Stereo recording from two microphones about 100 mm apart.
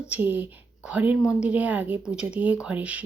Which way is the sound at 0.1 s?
20° right (ahead or behind).